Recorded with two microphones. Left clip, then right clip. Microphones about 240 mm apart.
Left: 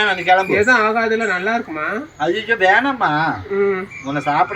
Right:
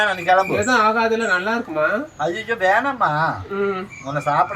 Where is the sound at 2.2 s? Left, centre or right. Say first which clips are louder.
Left 6 dB; right.